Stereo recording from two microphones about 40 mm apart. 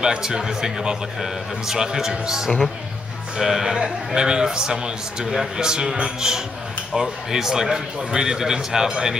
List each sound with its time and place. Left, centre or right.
0.0 s speech: centre